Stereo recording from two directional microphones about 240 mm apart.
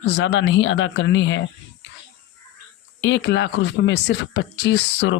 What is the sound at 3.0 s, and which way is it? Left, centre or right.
Speech, left.